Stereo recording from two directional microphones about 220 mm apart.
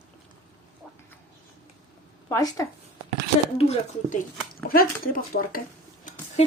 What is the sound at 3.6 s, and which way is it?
Speech, 25° left (ahead or behind).